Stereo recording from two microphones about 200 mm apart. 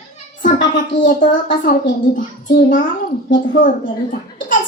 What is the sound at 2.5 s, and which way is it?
Speech, 40° left (ahead or behind).